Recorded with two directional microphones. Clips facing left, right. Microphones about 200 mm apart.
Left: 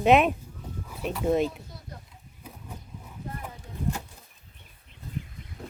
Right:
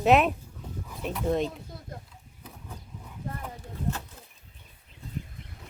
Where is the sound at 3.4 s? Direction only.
15° left (ahead or behind).